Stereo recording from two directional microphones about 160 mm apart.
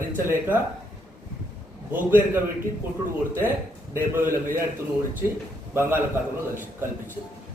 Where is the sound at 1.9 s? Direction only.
10° right (ahead or behind).